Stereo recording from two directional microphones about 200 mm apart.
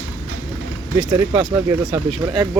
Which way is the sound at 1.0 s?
20° right (ahead or behind).